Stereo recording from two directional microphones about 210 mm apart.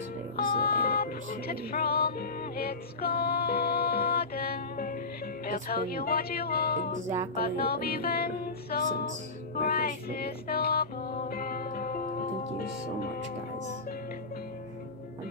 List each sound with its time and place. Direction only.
0.6 s music: 45° left (ahead or behind)